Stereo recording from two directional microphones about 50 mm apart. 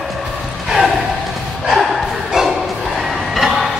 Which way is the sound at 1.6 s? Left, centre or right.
Centre.